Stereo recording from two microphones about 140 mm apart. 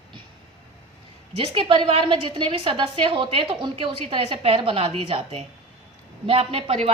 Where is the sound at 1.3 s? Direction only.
40° right (ahead or behind).